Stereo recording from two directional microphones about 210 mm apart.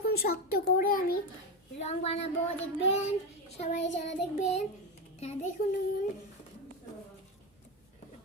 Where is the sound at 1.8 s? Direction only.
30° left (ahead or behind).